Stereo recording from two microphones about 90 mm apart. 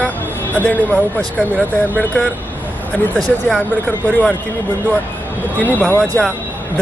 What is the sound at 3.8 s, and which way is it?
Speech, 20° left (ahead or behind).